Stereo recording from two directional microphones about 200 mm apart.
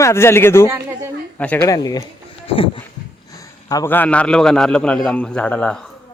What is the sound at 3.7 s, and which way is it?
A man's voice, 15° left (ahead or behind).